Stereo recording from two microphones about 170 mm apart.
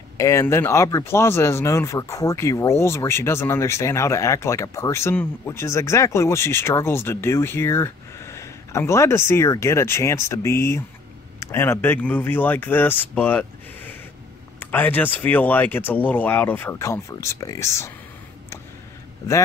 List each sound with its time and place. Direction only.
0.2 s speech: 15° left (ahead or behind)